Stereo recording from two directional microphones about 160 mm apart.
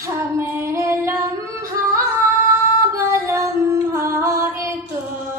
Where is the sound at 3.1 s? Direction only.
15° right (ahead or behind).